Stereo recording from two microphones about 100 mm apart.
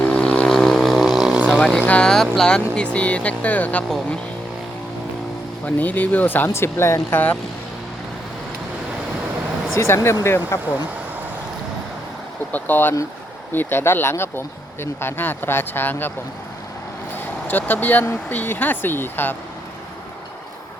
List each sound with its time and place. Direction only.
0.0 s vehicle: 10° left (ahead or behind); by 1.6 s 10° right (ahead or behind)
1.9 s speech: 10° left (ahead or behind)
5.6 s speech: 15° left (ahead or behind)
9.7 s speech: 25° left (ahead or behind)
12.5 s speech: 15° left (ahead or behind)
17.2 s speech: 20° left (ahead or behind)